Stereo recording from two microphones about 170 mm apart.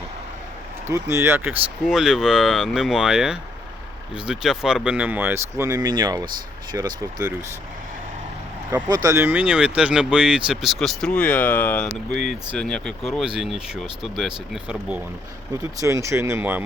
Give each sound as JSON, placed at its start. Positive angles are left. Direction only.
{"t": 0.9, "sound": "speech", "side_deg": -15}
{"t": 1.8, "sound": "speech", "side_deg": 0}
{"t": 8.9, "sound": "speech", "side_deg": -20}
{"t": 15.8, "sound": "speech", "side_deg": -15}